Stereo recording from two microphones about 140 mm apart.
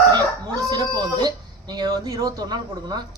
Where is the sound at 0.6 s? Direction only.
30° right (ahead or behind).